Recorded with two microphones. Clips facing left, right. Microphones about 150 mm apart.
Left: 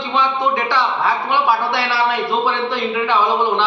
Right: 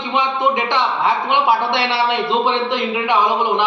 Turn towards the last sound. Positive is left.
turn(degrees=-15)  # may be behind; listen again after turning